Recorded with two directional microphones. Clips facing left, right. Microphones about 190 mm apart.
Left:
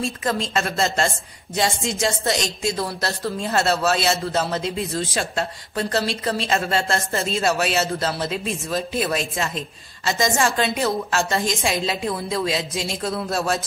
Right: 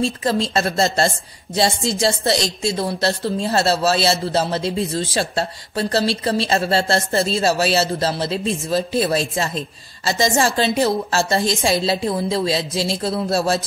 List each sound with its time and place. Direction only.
0.0 s a woman's voice: 30° right (ahead or behind)